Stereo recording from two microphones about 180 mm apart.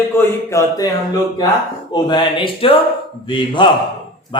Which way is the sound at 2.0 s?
25° left (ahead or behind).